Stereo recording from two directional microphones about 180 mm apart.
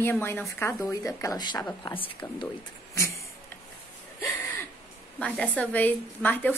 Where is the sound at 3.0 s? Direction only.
15° left (ahead or behind).